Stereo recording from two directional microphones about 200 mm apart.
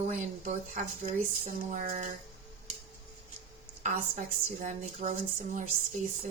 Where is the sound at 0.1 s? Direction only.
40° right (ahead or behind).